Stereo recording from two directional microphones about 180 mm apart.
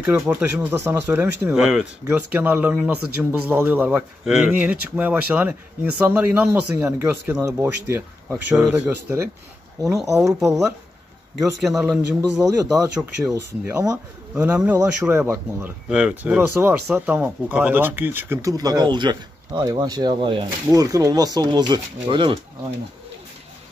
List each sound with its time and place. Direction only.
0.0 s speech: 10° right (ahead or behind)
11.6 s a man's voice: centre (ahead or behind)
12.4 s speech: 20° right (ahead or behind)